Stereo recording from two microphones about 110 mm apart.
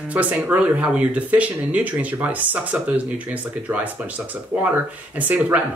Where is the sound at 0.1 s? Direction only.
15° right (ahead or behind).